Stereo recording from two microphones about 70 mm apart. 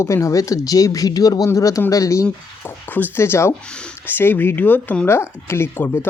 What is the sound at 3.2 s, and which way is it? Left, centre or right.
Speech, left.